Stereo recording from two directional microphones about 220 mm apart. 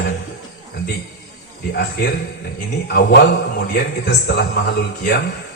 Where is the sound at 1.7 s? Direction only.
45° left (ahead or behind).